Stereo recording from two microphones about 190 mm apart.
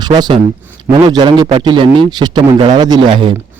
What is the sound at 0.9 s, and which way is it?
A man's voice, 25° right (ahead or behind).